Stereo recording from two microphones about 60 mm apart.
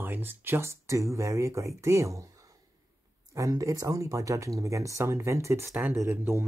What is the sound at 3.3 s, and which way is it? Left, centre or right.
Speech, right.